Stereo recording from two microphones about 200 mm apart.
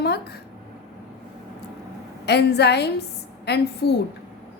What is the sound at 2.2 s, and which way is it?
A woman's voice, 55° left (ahead or behind).